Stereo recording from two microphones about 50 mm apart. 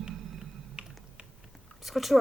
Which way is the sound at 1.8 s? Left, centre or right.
Centre.